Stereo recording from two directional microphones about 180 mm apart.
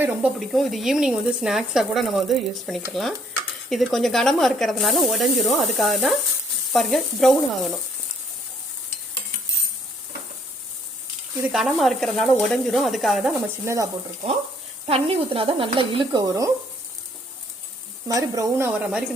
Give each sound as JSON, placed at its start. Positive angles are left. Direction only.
{"t": 0.0, "sound": "speech", "side_deg": -5}
{"t": 11.4, "sound": "speech", "side_deg": 0}
{"t": 13.7, "sound": "speech", "side_deg": -15}
{"t": 14.8, "sound": "speech", "side_deg": -30}
{"t": 18.1, "sound": "speech", "side_deg": -20}